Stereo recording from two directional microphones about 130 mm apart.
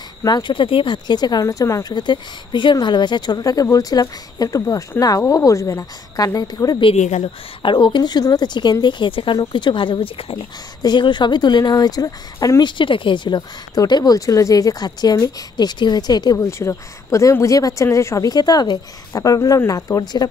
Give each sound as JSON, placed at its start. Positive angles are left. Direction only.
{"t": 0.2, "sound": "speech", "side_deg": 35}
{"t": 7.0, "sound": "a woman's voice", "side_deg": 65}
{"t": 7.6, "sound": "speech", "side_deg": 40}